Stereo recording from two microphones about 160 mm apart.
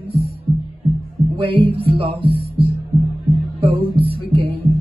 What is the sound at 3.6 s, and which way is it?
Speech, 35° right (ahead or behind).